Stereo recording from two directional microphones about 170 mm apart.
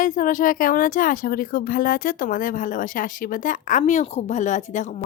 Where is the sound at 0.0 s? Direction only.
50° left (ahead or behind).